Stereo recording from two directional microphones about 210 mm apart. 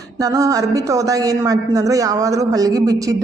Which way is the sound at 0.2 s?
15° right (ahead or behind).